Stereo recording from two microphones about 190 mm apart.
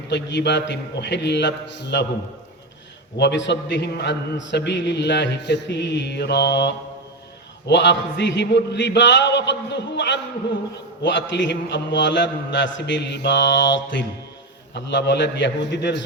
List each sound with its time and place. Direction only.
0.1 s a man's voice: 65° left (ahead or behind)
3.2 s a man's voice: 65° left (ahead or behind)